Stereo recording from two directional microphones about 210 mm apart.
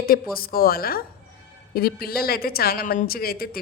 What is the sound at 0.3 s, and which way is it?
A woman's voice, 45° left (ahead or behind).